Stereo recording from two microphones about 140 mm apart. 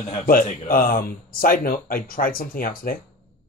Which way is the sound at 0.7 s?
90° left.